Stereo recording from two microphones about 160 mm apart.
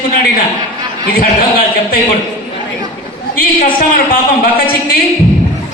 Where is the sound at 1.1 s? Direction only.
65° left (ahead or behind).